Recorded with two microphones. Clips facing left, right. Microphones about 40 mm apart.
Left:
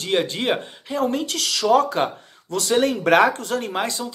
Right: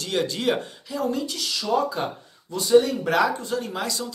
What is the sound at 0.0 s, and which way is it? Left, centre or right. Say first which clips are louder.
Speech: left 2 dB; left.